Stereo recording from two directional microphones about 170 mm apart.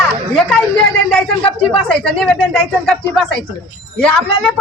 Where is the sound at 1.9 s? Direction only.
5° left (ahead or behind).